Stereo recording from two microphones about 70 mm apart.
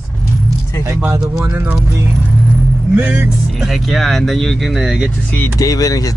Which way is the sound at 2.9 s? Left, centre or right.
Right.